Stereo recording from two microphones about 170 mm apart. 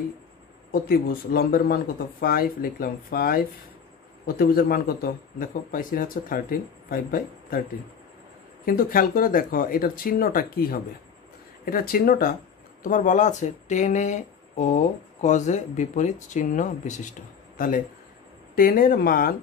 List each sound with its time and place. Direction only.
0.7 s a man's voice: 60° left (ahead or behind)
8.6 s a man's voice: 55° left (ahead or behind)